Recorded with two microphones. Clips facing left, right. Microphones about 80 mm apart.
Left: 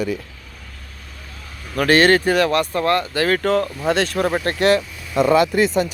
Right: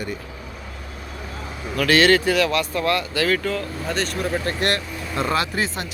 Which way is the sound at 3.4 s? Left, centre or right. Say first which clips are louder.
Left 7 dB; left.